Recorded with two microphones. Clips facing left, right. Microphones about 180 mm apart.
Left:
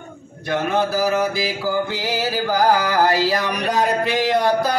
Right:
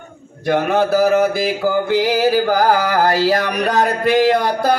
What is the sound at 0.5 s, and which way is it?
Mantra, 55° right (ahead or behind).